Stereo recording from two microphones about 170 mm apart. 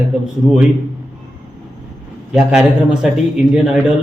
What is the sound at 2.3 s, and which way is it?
Speech, 5° right (ahead or behind).